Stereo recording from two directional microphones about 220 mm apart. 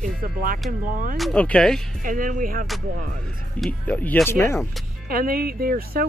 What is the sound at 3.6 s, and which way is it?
Speech, 5° left (ahead or behind).